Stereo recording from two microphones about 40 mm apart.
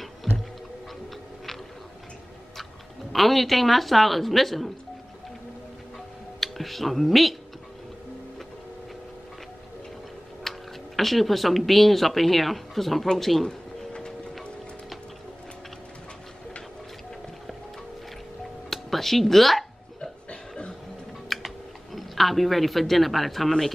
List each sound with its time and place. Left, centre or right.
3.1 s speech: centre
6.4 s speech: centre
10.4 s tick-tock: centre
11.0 s speech: centre
13.5 s a sound: centre
18.7 s music: centre
20.0 s a sound: left
21.3 s typing: centre
21.9 s speech: centre